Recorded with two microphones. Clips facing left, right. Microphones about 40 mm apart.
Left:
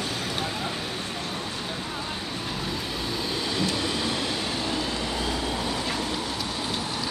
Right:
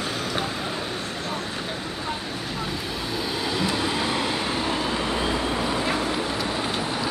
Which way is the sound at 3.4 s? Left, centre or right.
Centre.